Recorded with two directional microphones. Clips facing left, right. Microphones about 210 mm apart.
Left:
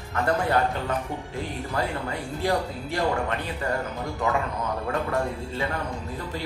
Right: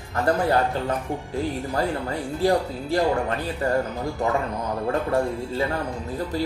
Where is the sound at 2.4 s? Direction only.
35° right (ahead or behind).